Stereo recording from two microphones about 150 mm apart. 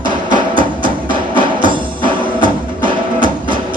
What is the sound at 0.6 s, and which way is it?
Music, 35° right (ahead or behind).